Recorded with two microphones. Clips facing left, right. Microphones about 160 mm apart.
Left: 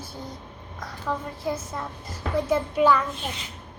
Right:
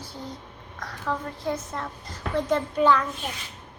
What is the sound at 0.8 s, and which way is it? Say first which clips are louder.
Child singing: even; 10° left (ahead or behind).